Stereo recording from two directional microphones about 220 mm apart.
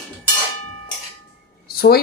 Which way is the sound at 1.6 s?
45° left (ahead or behind).